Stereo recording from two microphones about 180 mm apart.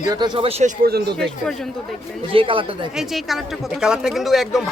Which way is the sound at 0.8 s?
60° right (ahead or behind).